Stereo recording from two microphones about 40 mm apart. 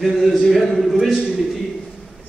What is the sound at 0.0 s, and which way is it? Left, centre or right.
A man's voice, centre.